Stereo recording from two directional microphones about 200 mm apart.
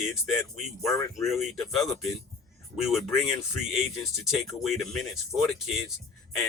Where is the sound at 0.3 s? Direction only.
Centre (ahead or behind).